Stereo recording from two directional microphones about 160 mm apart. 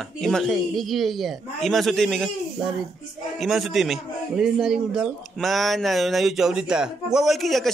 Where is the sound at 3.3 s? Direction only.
Centre (ahead or behind).